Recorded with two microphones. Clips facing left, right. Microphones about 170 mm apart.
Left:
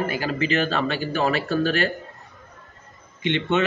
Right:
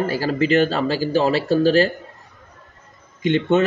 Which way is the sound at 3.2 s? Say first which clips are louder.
Right 5 dB; 40° right (ahead or behind).